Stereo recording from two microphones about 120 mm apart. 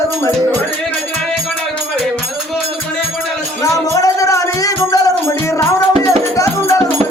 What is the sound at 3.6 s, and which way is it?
Music, 30° left (ahead or behind).